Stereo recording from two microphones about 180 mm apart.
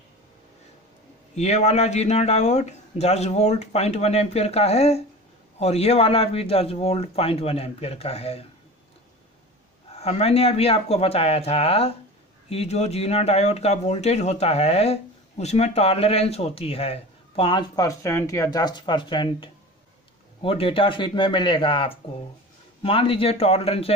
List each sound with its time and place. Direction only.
1.3 s speech: 40° left (ahead or behind)
9.8 s speech: 35° left (ahead or behind)